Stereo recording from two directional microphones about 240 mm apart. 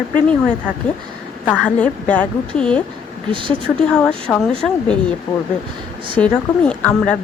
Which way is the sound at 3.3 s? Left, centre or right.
Right.